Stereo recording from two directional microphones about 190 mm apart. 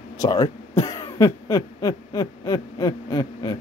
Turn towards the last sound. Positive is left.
turn(degrees=20)  # may be behind; listen again after turning